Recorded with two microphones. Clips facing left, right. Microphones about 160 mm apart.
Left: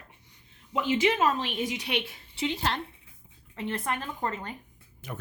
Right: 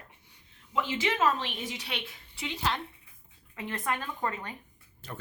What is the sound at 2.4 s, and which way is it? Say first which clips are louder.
A woman's voice: left 3 dB; 35° left (ahead or behind).